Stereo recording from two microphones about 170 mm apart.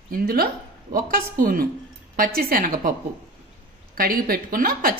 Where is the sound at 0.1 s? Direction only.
55° right (ahead or behind).